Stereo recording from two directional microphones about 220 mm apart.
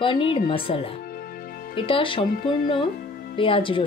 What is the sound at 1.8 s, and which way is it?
Speech, 25° left (ahead or behind).